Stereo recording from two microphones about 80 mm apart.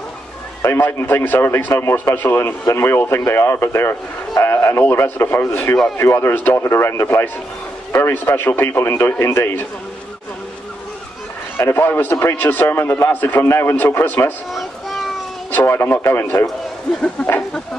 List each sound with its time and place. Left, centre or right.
0.6 s a man's voice: left
11.5 s a man's voice: left
14.5 s a sound: centre
15.5 s a man's voice: left